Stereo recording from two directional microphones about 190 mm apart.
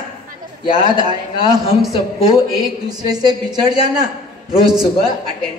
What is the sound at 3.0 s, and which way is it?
A woman's voice, 20° right (ahead or behind).